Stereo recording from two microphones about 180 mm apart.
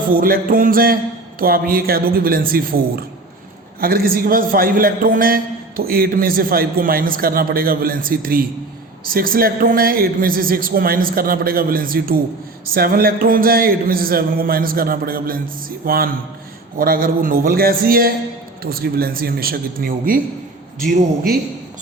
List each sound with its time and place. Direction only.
0.1 s a man's voice: 50° right (ahead or behind)